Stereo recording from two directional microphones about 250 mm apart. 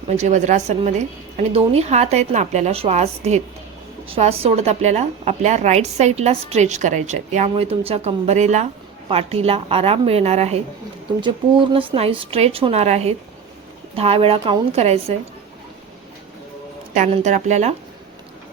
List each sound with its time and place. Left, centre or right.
0.1 s a woman's voice: right
16.9 s a woman's voice: right